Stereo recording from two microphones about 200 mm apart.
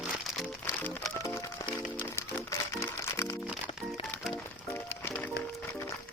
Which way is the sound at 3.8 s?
Centre (ahead or behind).